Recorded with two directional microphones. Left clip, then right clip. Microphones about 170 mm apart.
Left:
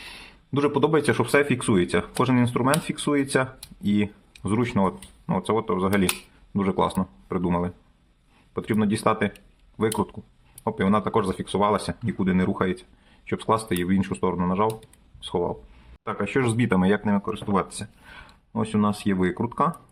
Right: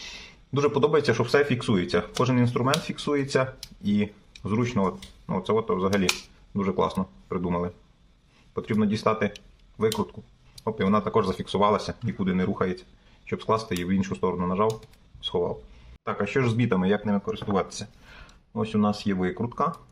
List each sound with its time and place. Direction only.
0.5 s a man's voice: 15° left (ahead or behind)
10.6 s speech: 20° left (ahead or behind)
12.2 s speech: 30° left (ahead or behind)